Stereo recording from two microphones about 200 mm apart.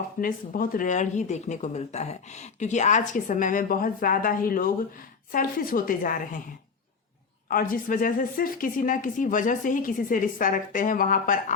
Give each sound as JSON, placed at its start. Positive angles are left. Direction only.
{"t": 0.2, "sound": "speech", "side_deg": 45}
{"t": 7.4, "sound": "a woman's voice", "side_deg": 45}